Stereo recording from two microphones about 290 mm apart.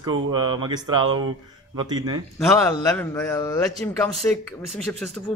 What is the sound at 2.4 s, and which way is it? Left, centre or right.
A man's voice, centre.